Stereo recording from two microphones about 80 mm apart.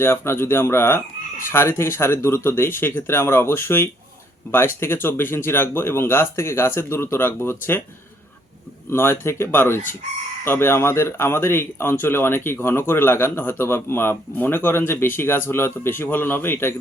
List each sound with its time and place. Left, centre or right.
0.0 s speech: left
8.9 s speech: left